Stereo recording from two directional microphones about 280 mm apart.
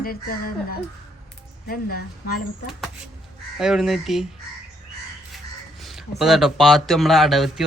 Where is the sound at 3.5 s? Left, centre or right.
Centre.